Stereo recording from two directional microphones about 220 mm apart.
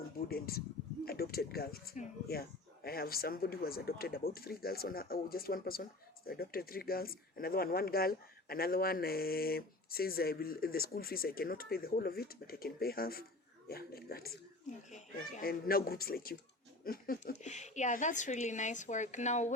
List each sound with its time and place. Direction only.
0.2 s speech: 45° left (ahead or behind)